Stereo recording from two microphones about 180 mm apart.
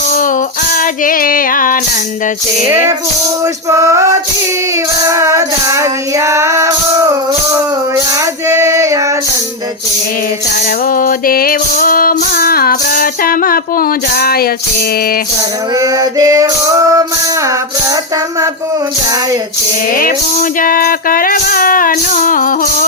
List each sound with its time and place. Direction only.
0.1 s child singing: 45° left (ahead or behind)
3.4 s music: 15° right (ahead or behind)
8.4 s music: 15° right (ahead or behind)
10.8 s music: 50° left (ahead or behind)
15.8 s music: 20° right (ahead or behind)
20.0 s music: 50° left (ahead or behind)